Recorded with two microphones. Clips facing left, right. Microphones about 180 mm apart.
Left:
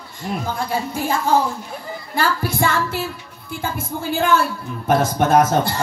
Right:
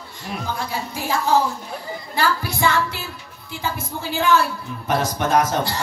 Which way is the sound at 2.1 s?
50° left (ahead or behind).